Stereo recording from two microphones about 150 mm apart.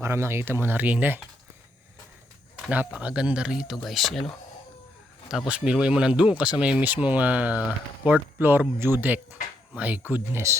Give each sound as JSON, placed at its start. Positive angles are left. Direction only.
{"t": 0.0, "sound": "speech", "side_deg": -15}
{"t": 2.6, "sound": "speech", "side_deg": -10}
{"t": 5.5, "sound": "speech", "side_deg": -5}